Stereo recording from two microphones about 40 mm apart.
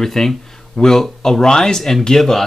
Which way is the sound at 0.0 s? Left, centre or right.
Centre.